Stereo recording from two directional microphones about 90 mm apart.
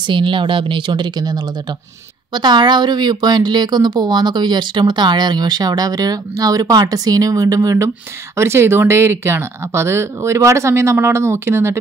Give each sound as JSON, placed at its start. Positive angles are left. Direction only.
{"t": 0.0, "sound": "speech", "side_deg": -65}